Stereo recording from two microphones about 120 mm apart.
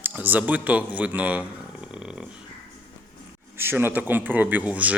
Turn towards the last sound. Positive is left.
turn(degrees=-10)  # may be behind; listen again after turning